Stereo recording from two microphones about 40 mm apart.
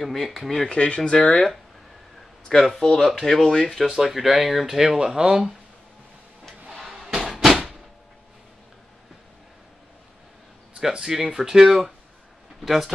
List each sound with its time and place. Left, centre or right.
0.0 s speech: centre
0.7 s speech: left
1.1 s speech: centre
2.5 s speech: centre
4.8 s speech: centre
6.7 s a sound: centre
10.9 s speech: centre